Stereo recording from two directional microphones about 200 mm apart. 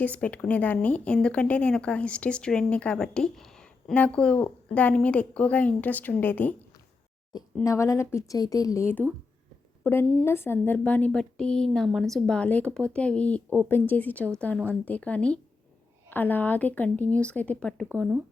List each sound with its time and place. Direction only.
0.0 s a woman's voice: 5° left (ahead or behind)
7.6 s a woman's voice: 15° left (ahead or behind)